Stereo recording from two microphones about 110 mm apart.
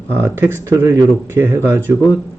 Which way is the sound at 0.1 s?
20° right (ahead or behind).